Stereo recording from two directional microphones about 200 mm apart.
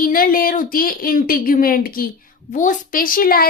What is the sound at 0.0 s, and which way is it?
A woman's voice, 45° left (ahead or behind).